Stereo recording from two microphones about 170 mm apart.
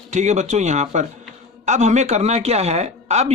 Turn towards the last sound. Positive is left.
turn(degrees=-40)  # may be behind; listen again after turning